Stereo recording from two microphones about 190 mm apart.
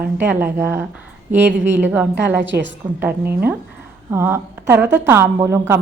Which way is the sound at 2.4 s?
70° right (ahead or behind).